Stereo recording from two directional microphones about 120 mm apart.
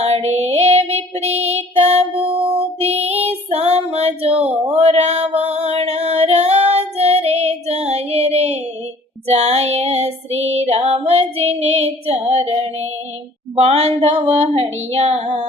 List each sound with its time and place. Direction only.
0.0 s female singing: 65° right (ahead or behind)
13.6 s a sound: 65° right (ahead or behind)
14.3 s female singing: 65° right (ahead or behind)